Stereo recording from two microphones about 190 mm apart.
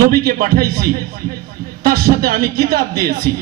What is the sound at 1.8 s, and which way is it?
A man's voice, 50° right (ahead or behind).